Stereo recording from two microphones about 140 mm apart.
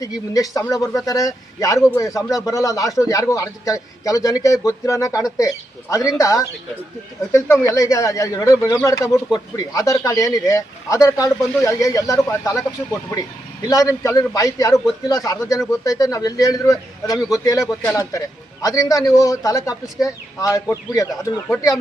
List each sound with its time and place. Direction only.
0.0 s speech: 25° left (ahead or behind)
13.7 s speech: 25° left (ahead or behind)